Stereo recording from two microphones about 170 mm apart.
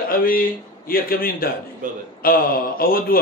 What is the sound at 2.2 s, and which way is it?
Speech, 60° left (ahead or behind).